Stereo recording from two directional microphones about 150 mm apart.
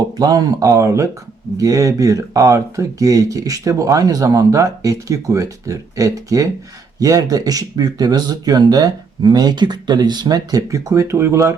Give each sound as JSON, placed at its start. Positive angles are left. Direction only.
{"t": 0.2, "sound": "speech", "side_deg": -25}